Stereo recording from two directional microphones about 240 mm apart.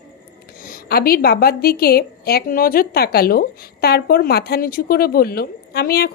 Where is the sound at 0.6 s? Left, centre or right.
Left.